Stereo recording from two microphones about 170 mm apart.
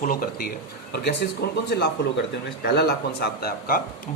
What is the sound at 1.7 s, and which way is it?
A man's voice, 70° left (ahead or behind).